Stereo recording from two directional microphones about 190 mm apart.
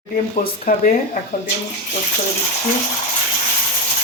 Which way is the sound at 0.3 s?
45° left (ahead or behind).